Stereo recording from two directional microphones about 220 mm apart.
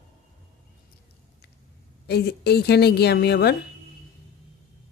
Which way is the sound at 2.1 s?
50° left (ahead or behind).